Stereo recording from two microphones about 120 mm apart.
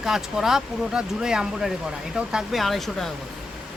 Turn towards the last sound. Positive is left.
turn(degrees=0)  # may be behind; listen again after turning